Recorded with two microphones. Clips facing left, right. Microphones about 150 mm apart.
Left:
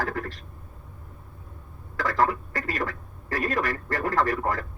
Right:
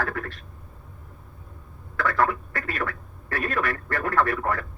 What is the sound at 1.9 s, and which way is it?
Speech, 35° left (ahead or behind).